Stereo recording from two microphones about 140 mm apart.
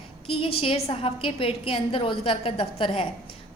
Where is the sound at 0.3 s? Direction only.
45° left (ahead or behind).